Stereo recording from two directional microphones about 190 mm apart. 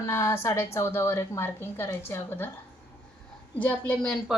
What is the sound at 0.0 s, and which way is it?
A woman's voice, 15° left (ahead or behind).